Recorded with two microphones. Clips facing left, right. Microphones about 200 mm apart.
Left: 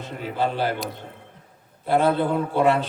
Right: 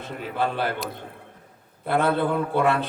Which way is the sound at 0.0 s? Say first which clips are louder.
Left 1 dB; 55° right (ahead or behind).